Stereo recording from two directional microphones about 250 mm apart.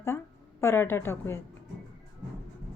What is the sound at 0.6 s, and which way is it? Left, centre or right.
Speech, centre.